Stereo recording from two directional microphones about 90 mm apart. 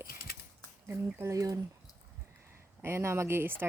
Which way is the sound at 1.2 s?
35° right (ahead or behind).